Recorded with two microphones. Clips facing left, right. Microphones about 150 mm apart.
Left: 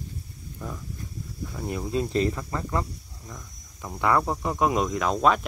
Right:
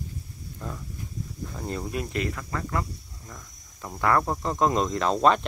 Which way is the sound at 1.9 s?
30° left (ahead or behind).